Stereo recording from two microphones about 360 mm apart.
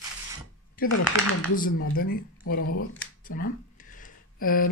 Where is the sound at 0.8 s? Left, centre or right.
Left.